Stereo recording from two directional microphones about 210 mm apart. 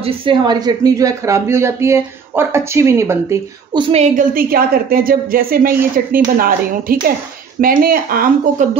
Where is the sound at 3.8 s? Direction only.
30° right (ahead or behind).